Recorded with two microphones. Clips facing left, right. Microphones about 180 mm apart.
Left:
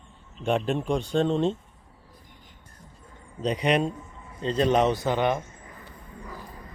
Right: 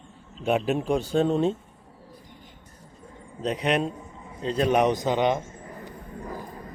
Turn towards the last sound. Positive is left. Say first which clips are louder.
# right 5 dB
turn(degrees=-45)  # may be behind; listen again after turning